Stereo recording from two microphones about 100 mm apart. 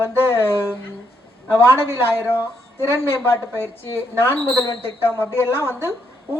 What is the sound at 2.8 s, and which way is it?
Speech, 25° left (ahead or behind).